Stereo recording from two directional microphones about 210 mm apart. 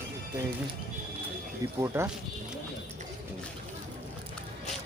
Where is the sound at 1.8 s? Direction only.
10° right (ahead or behind).